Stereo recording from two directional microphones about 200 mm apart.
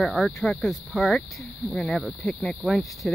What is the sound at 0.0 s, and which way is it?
Speech, centre (ahead or behind).